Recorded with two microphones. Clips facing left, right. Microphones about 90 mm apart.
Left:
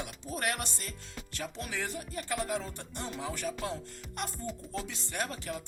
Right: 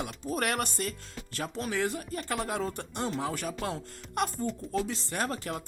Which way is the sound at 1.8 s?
55° right (ahead or behind).